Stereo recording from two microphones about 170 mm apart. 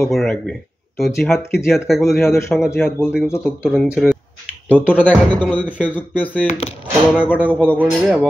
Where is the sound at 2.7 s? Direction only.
15° left (ahead or behind).